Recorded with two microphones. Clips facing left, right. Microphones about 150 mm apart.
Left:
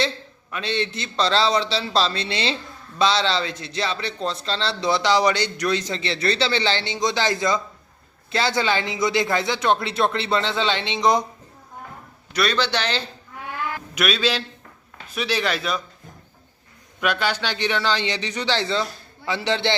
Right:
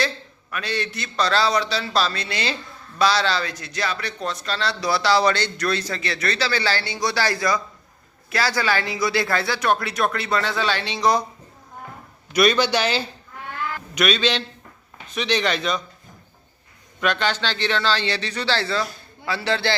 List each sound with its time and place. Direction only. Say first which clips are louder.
0.5 s speech: left 2 dB; 25° left (ahead or behind)
12.3 s speech: right 4 dB; 15° right (ahead or behind)
13.9 s speech: right 2 dB; 5° left (ahead or behind)
17.0 s a man's voice: right 1 dB; 10° left (ahead or behind)